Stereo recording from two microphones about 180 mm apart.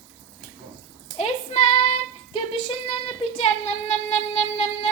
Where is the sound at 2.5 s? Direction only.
35° left (ahead or behind).